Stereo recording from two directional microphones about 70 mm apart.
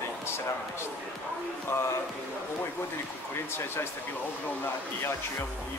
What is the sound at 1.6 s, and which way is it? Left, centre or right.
Speech, left.